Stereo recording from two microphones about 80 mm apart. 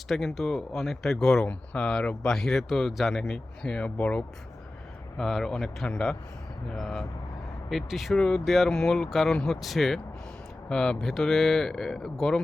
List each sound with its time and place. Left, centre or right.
0.1 s speech: centre
5.1 s speech: centre